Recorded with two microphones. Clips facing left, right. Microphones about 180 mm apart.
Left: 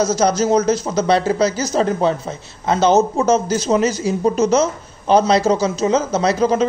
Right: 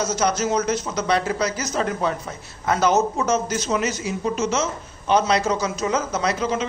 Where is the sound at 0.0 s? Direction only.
35° left (ahead or behind).